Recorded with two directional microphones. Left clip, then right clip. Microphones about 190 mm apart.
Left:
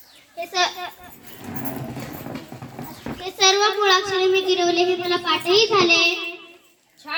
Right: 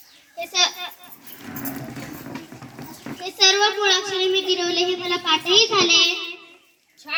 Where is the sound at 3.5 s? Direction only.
45° left (ahead or behind).